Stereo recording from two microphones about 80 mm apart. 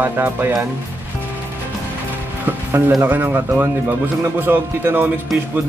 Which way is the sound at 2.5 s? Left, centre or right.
Right.